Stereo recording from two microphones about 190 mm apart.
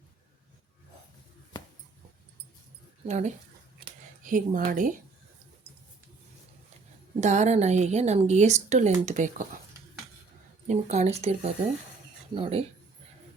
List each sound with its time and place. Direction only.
3.1 s a woman's voice: 40° right (ahead or behind)
7.2 s a woman's voice: 40° right (ahead or behind)
10.7 s a woman's voice: 35° right (ahead or behind)